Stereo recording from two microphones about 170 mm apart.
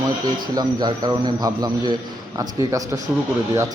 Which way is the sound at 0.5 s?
25° right (ahead or behind).